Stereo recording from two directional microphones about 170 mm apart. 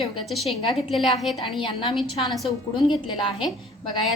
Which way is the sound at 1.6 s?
30° left (ahead or behind).